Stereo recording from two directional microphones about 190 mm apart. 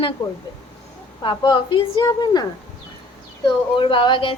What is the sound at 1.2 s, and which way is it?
A woman's voice, 25° left (ahead or behind).